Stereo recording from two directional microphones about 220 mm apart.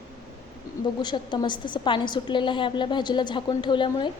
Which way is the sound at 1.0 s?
20° left (ahead or behind).